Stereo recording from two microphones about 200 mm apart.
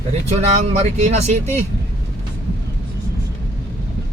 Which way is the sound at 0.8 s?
35° right (ahead or behind).